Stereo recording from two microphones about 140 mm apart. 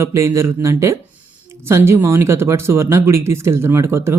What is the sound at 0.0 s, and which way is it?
Speech, 20° right (ahead or behind).